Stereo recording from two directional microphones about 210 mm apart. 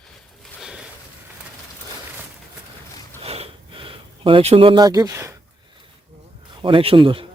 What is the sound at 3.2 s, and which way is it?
Sniff, 30° right (ahead or behind).